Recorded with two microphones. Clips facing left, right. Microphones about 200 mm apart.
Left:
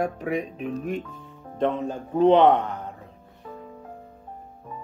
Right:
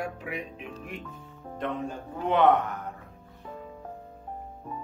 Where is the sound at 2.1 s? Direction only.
25° left (ahead or behind).